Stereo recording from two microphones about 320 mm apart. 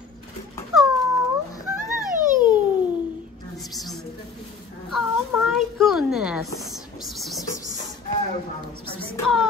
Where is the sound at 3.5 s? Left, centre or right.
Centre.